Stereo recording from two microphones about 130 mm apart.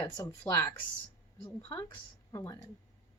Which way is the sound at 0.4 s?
20° left (ahead or behind).